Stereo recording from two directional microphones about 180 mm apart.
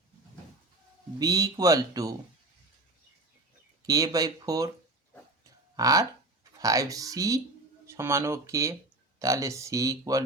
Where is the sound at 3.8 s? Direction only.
20° right (ahead or behind).